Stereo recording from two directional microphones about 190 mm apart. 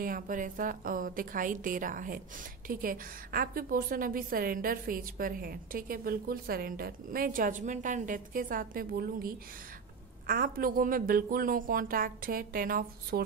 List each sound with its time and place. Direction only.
0.0 s a woman's voice: 45° right (ahead or behind)